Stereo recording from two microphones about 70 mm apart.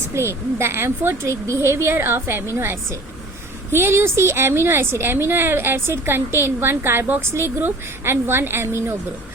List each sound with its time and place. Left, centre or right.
0.1 s a woman's voice: right
3.7 s a woman's voice: right